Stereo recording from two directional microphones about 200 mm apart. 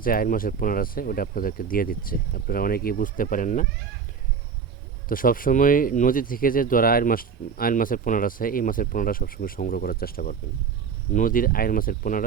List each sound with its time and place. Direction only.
0.0 s speech: 45° left (ahead or behind)
5.0 s speech: 45° left (ahead or behind)